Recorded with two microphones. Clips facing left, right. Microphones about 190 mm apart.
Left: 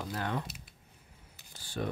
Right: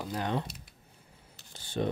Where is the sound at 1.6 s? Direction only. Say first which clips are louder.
Right 5 dB; 25° right (ahead or behind).